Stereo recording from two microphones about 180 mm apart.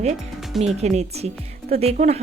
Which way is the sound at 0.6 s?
40° right (ahead or behind).